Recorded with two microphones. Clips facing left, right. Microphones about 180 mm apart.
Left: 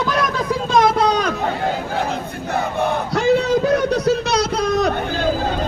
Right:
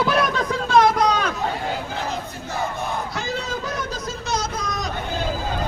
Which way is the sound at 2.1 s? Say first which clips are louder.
Left 6 dB; 60° left (ahead or behind).